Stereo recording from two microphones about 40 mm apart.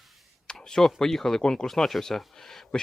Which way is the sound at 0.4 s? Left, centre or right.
Centre.